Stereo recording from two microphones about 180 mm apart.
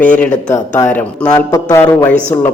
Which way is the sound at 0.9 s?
10° left (ahead or behind).